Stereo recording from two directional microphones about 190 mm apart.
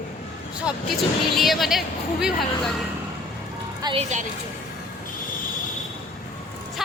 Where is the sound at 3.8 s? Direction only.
25° right (ahead or behind).